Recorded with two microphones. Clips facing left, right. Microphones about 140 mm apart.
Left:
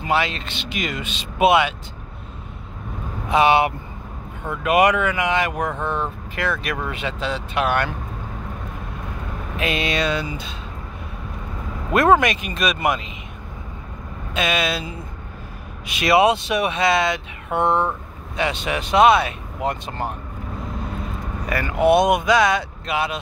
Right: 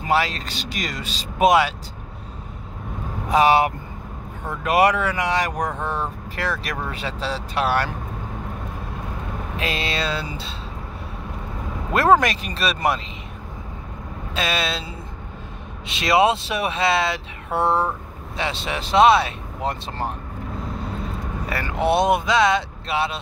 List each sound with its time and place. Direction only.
0.0 s speech: 40° right (ahead or behind)
3.3 s speech: 40° right (ahead or behind)
9.6 s speech: 30° right (ahead or behind)
11.9 s speech: 30° right (ahead or behind)
14.3 s speech: 30° right (ahead or behind)
15.9 s speech: 25° right (ahead or behind)
17.6 s speech: 5° right (ahead or behind)
18.3 s speech: 30° right (ahead or behind)
21.5 s speech: 30° right (ahead or behind)